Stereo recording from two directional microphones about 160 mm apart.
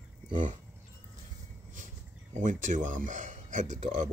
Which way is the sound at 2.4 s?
55° right (ahead or behind).